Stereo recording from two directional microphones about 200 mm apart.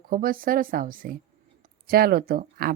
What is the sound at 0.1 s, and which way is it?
Speech, 45° right (ahead or behind).